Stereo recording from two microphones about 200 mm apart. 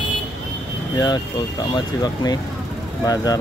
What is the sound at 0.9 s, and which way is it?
Speech, 20° left (ahead or behind).